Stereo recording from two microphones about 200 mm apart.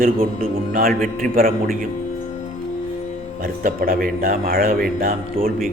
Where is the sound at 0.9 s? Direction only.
5° left (ahead or behind).